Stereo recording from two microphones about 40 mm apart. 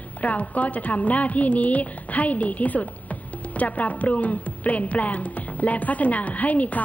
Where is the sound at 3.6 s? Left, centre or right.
Left.